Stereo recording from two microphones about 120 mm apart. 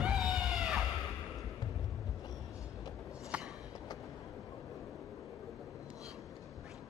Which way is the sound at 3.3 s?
10° right (ahead or behind).